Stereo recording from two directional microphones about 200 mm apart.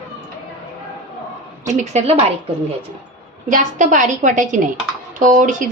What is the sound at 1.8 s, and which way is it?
Speech, 35° right (ahead or behind).